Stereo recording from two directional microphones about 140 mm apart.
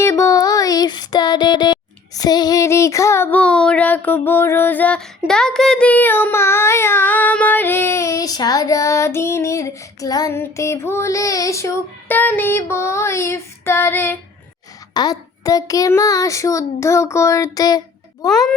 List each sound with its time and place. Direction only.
0.0 s child singing: 20° left (ahead or behind)
14.9 s child singing: 25° left (ahead or behind)
18.3 s a child's voice: 5° left (ahead or behind)